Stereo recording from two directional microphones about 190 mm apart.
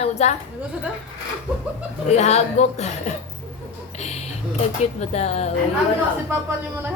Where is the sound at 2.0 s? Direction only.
35° left (ahead or behind).